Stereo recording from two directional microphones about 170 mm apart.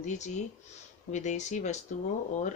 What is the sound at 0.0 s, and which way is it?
Speech, 45° left (ahead or behind).